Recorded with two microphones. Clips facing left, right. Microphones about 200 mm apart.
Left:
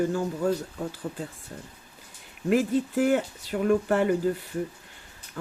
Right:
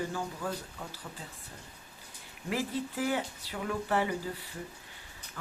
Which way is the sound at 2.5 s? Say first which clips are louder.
Left 10 dB; 50° left (ahead or behind).